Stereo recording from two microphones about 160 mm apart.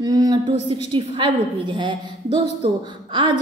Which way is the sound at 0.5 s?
30° right (ahead or behind).